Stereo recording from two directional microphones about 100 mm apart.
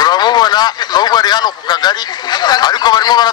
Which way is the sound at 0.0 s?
45° left (ahead or behind).